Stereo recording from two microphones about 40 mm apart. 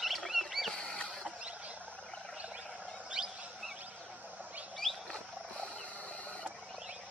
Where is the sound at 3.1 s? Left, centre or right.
Centre.